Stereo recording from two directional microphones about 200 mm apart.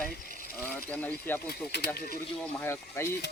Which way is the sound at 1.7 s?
55° left (ahead or behind).